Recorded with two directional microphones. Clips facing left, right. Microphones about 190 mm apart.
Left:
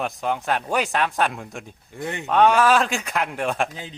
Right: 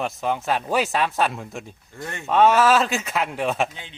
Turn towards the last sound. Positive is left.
turn(degrees=0)  # may be behind; listen again after turning